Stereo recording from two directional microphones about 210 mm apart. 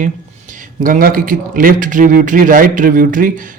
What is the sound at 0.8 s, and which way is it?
A man's voice, 40° right (ahead or behind).